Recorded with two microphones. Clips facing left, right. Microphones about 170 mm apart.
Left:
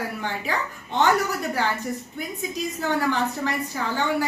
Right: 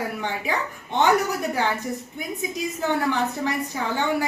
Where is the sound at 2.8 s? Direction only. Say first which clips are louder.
Right 1 dB; 15° right (ahead or behind).